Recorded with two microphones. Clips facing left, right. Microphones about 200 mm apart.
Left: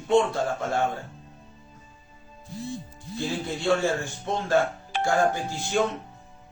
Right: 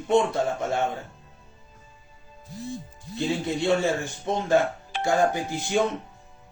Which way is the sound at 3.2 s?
20° right (ahead or behind).